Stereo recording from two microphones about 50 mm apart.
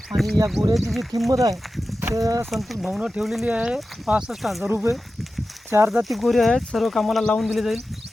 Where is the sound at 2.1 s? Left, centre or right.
Right.